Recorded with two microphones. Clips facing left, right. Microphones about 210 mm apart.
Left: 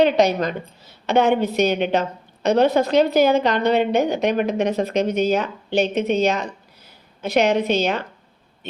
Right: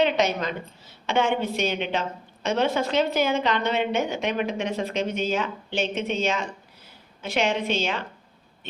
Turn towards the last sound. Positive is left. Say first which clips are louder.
# left 6 dB
turn(degrees=40)  # may be behind; listen again after turning